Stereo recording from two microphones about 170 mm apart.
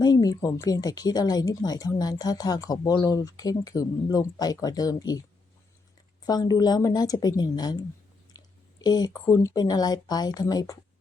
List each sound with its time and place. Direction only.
0.0 s speech: 20° left (ahead or behind)
6.2 s speech: 25° left (ahead or behind)
8.4 s a sound: 20° left (ahead or behind)
8.8 s speech: 25° left (ahead or behind)